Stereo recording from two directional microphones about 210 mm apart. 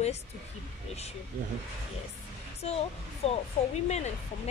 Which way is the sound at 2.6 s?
30° left (ahead or behind).